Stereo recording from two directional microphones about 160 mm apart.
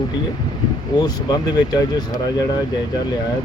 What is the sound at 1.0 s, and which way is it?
Speech, 25° left (ahead or behind).